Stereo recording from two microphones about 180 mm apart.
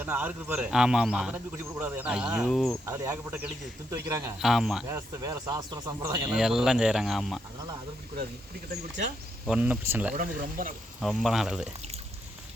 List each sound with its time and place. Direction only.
0.0 s a man's voice: 10° right (ahead or behind)
2.8 s speech: 15° right (ahead or behind)
4.4 s a man's voice: centre (ahead or behind)
4.9 s speech: 15° right (ahead or behind)
6.3 s a man's voice: 5° right (ahead or behind)
9.5 s speech: 10° right (ahead or behind)
10.2 s speech: 50° right (ahead or behind)
11.0 s a man's voice: centre (ahead or behind)